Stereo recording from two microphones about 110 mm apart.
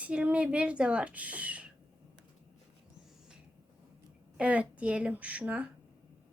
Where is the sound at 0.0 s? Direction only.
10° right (ahead or behind).